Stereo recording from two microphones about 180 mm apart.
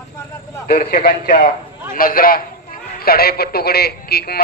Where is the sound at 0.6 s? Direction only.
55° left (ahead or behind).